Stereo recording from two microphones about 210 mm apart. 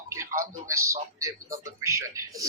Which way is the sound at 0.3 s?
15° right (ahead or behind).